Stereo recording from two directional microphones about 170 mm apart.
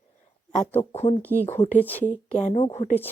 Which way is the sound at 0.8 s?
35° left (ahead or behind).